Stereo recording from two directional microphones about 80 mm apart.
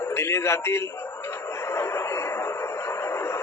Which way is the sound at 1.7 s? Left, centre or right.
Left.